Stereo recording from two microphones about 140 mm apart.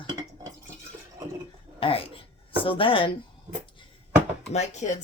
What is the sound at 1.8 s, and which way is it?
Speech, 40° left (ahead or behind).